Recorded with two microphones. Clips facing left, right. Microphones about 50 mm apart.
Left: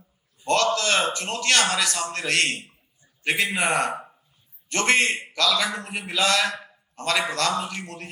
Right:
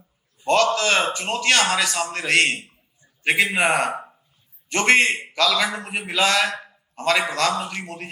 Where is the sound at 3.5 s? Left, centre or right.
Right.